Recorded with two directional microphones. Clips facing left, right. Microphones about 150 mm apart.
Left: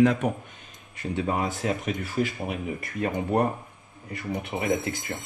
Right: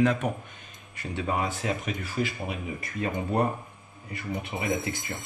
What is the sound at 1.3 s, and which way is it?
Speech, 40° left (ahead or behind).